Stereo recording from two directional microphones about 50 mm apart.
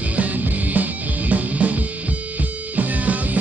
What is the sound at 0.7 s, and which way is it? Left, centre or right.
Music, right.